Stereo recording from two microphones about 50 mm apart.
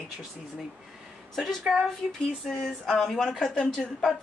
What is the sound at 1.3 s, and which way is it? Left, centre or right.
Speech, centre.